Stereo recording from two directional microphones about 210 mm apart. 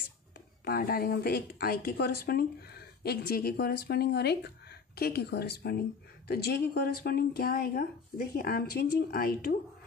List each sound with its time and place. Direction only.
0.7 s a woman's voice: 45° left (ahead or behind)